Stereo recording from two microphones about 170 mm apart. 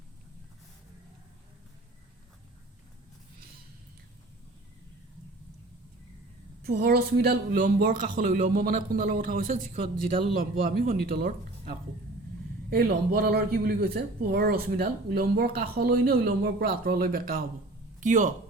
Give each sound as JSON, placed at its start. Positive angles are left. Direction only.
{"t": 6.6, "sound": "speech", "side_deg": -70}
{"t": 18.0, "sound": "speech", "side_deg": -45}